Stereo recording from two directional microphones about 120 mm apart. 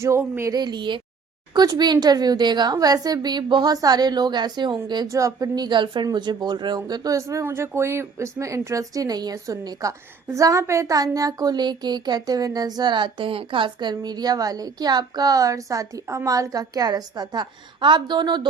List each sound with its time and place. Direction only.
0.0 s speech: 20° right (ahead or behind)
0.5 s a woman's voice: 35° right (ahead or behind)